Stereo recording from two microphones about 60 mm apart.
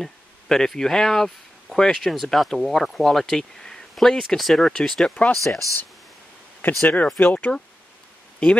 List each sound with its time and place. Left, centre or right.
0.0 s speech: centre
5.3 s speech: centre
6.6 s speech: left